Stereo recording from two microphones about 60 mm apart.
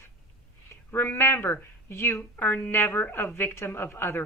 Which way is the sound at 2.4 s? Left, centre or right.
Left.